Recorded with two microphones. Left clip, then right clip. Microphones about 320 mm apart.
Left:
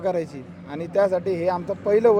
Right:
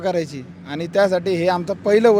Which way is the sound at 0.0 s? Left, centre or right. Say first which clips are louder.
Right 3 dB; right.